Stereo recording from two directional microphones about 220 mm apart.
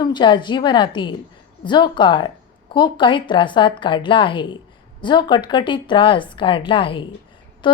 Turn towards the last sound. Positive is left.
turn(degrees=20)  # may be behind; listen again after turning